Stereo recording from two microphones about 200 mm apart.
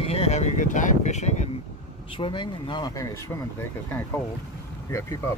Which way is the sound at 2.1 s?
25° left (ahead or behind).